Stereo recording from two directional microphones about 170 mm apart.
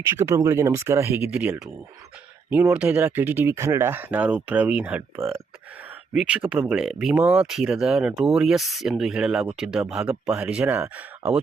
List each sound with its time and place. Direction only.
0.0 s speech: 15° right (ahead or behind)